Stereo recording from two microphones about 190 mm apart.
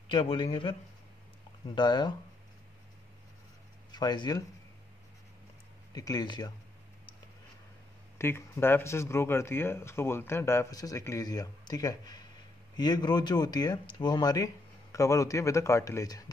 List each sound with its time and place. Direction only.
0.1 s speech: 25° left (ahead or behind)
1.8 s speech: 25° left (ahead or behind)
3.9 s speech: 20° left (ahead or behind)
5.9 s speech: 20° left (ahead or behind)
8.2 s speech: 15° left (ahead or behind)